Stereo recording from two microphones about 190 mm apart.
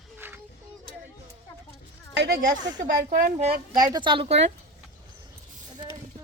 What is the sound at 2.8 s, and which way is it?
Speech, 45° right (ahead or behind).